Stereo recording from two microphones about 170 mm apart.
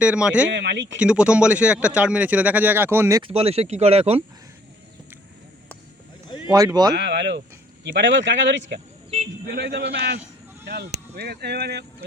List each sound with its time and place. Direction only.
0.0 s speech: 5° right (ahead or behind)
0.5 s speech: 90° right
0.9 s speech: 5° right (ahead or behind)
3.2 s speech: 35° right (ahead or behind)
6.9 s speech: 80° right
9.5 s speech: 70° right (ahead or behind)